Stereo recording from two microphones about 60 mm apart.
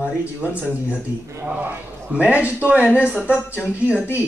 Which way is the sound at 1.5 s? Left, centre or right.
Right.